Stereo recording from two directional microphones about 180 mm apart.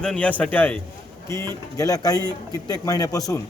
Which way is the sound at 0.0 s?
5° left (ahead or behind).